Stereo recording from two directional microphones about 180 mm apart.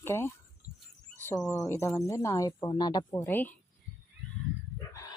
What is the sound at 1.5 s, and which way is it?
Speech, 15° left (ahead or behind).